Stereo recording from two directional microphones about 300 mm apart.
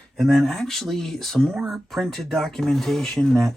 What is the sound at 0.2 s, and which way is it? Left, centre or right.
Speech, centre.